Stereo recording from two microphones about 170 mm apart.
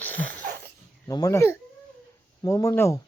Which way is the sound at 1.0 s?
20° left (ahead or behind).